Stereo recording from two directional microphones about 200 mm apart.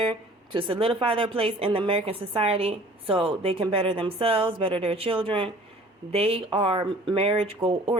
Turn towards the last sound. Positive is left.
turn(degrees=-25)  # may be behind; listen again after turning